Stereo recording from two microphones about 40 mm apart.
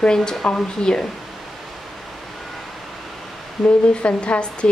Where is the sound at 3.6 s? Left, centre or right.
Centre.